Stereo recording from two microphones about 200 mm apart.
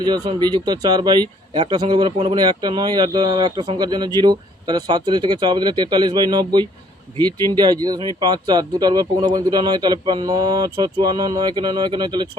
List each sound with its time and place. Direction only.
0.0 s speech: 20° right (ahead or behind)